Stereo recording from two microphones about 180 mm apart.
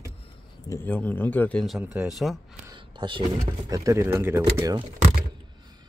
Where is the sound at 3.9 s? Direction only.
15° right (ahead or behind).